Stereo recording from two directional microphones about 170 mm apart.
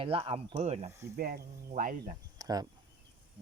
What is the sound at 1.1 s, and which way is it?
Speech, 60° right (ahead or behind).